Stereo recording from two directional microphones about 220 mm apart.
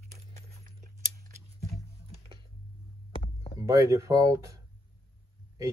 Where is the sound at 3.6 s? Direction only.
15° right (ahead or behind).